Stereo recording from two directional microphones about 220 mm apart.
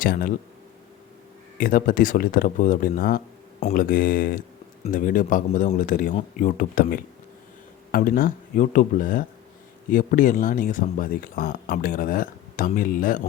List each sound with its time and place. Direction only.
0.0 s speech: 40° left (ahead or behind)
1.5 s speech: 40° left (ahead or behind)